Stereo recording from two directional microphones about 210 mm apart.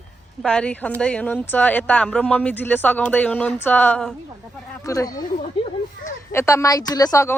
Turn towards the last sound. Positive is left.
turn(degrees=15)  # may be behind; listen again after turning